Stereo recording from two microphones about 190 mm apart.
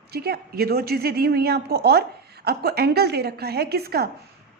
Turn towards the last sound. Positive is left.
turn(degrees=-55)  # may be behind; listen again after turning